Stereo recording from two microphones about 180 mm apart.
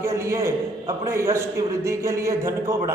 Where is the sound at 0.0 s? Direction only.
15° right (ahead or behind).